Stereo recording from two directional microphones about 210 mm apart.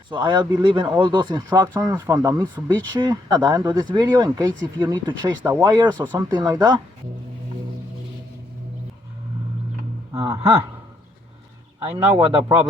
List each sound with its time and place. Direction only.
0.1 s speech: 20° right (ahead or behind)
10.1 s a sound: 20° right (ahead or behind)
12.0 s speech: 15° right (ahead or behind)